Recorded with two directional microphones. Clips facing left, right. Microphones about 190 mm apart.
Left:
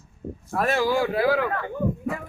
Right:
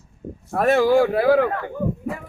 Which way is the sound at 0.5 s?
55° right (ahead or behind).